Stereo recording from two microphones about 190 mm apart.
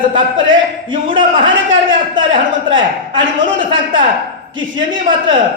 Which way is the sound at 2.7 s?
25° right (ahead or behind).